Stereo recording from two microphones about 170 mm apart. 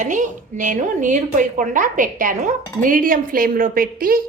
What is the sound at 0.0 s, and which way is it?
A woman's voice, 50° right (ahead or behind).